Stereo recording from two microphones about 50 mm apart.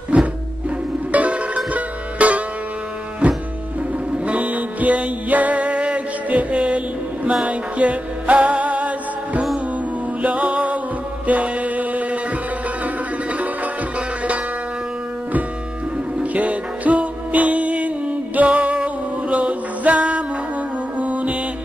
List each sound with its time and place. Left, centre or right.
0.1 s music: right
16.2 s music: right